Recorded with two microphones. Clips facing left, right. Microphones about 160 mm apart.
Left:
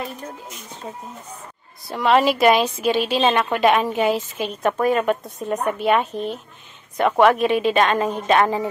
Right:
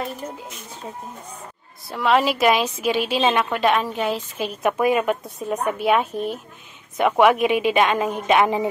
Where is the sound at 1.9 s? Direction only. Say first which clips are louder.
Left 2 dB; centre (ahead or behind).